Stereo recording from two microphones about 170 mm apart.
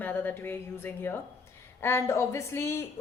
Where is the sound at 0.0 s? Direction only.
10° left (ahead or behind).